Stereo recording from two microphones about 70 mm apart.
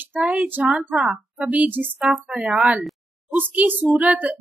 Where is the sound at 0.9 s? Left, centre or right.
Centre.